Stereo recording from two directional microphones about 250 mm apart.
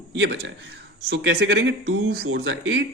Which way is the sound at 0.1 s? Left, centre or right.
Right.